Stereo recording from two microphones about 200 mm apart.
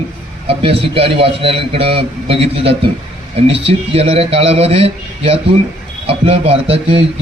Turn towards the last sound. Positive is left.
turn(degrees=-30)  # may be behind; listen again after turning